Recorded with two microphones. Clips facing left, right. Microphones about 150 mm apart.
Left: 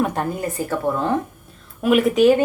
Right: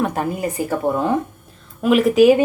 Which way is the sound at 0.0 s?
5° right (ahead or behind).